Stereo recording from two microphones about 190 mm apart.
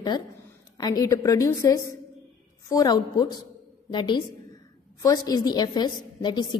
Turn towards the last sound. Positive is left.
turn(degrees=25)  # may be behind; listen again after turning